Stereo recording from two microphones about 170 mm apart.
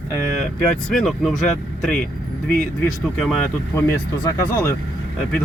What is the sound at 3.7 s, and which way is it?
Speech, 15° left (ahead or behind).